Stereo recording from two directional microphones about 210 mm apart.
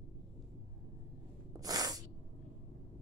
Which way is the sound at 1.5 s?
20° right (ahead or behind).